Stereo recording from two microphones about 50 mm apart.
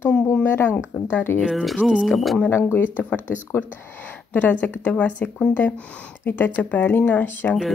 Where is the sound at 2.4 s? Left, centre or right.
Left.